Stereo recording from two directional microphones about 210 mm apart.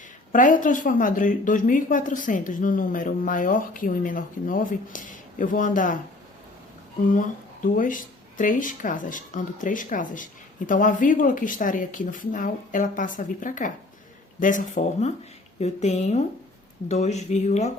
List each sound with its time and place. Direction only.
0.3 s a woman's voice: 40° left (ahead or behind)
7.1 s a woman's voice: 40° left (ahead or behind)